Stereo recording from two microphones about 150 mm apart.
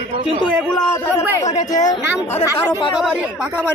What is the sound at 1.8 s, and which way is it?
Speech, 15° left (ahead or behind).